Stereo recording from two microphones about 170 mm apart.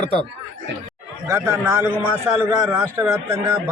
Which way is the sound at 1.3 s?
15° right (ahead or behind).